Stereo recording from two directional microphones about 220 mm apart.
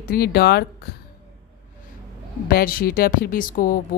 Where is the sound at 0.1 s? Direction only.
45° left (ahead or behind).